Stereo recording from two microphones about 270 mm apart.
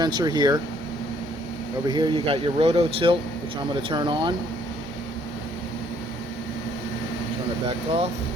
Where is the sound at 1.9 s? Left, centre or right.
Centre.